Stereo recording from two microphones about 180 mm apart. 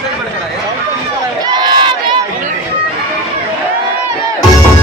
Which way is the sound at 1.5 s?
25° right (ahead or behind).